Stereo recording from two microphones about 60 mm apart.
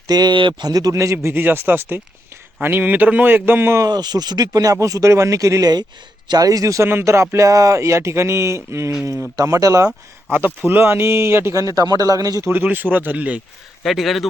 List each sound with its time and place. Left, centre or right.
0.1 s a man's voice: right
1.1 s a man's voice: right
3.8 s speech: right
6.3 s speech: right
7.0 s speech: right
9.3 s speech: right
10.7 s speech: right
11.5 s speech: right
12.5 s speech: right
13.8 s speech: centre